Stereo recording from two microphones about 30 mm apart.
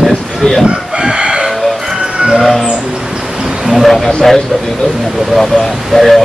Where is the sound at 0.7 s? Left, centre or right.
Right.